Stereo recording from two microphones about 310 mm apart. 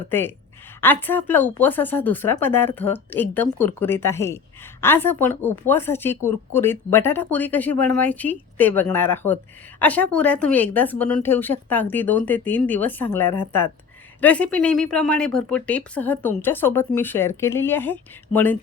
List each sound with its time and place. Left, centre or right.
0.1 s a woman's voice: centre